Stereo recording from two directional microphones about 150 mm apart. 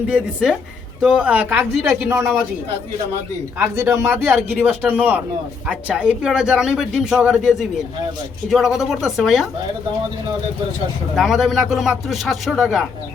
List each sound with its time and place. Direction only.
0.1 s speech: 5° right (ahead or behind)
3.6 s speech: 20° right (ahead or behind); by 9.5 s centre (ahead or behind)
11.1 s speech: centre (ahead or behind)